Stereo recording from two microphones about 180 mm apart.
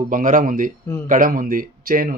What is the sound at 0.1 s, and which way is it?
Speech, 50° right (ahead or behind).